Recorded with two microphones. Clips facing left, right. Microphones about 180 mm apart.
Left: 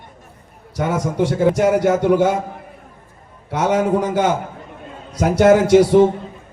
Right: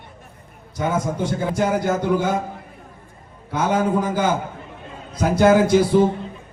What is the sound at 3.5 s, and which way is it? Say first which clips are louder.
Speech: left 3 dB; 75° left (ahead or behind).